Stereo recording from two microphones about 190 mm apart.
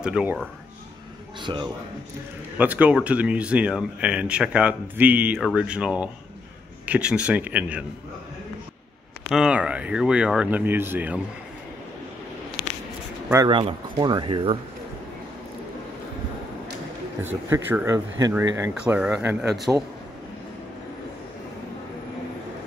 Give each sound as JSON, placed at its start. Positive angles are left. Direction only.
{"t": 0.0, "sound": "speech", "side_deg": -5}
{"t": 1.4, "sound": "a man's voice", "side_deg": -25}
{"t": 2.5, "sound": "speech", "side_deg": -10}
{"t": 9.3, "sound": "speech", "side_deg": -5}
{"t": 13.5, "sound": "speech", "side_deg": -25}
{"t": 17.2, "sound": "speech", "side_deg": -10}
{"t": 18.9, "sound": "speech", "side_deg": -5}